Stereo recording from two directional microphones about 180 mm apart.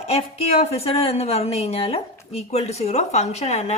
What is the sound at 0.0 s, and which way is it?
A woman's voice, 35° left (ahead or behind).